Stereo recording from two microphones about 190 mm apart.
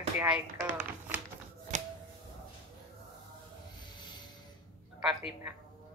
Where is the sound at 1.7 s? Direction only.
40° right (ahead or behind).